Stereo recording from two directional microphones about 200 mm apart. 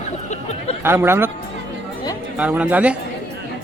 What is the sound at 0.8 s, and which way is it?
Speech, 10° right (ahead or behind).